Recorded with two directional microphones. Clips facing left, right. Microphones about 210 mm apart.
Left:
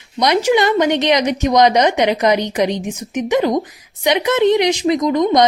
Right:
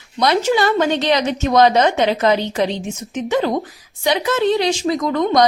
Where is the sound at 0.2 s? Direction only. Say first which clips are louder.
Left 2 dB; 15° left (ahead or behind).